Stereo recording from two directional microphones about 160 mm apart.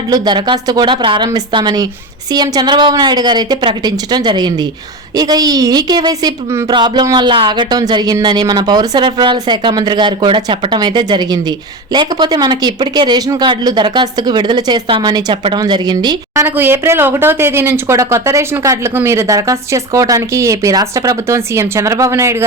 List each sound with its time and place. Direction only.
0.1 s speech: 30° right (ahead or behind)